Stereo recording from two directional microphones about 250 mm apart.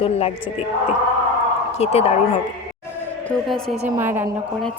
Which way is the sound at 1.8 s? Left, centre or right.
Left.